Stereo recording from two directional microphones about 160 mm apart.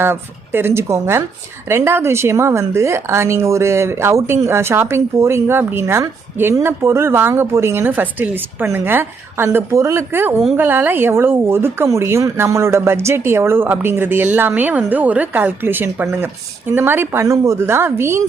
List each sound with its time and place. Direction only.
0.0 s a woman's voice: 15° right (ahead or behind)